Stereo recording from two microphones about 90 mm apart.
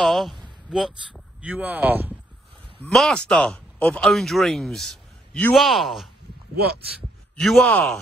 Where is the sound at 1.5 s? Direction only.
20° right (ahead or behind).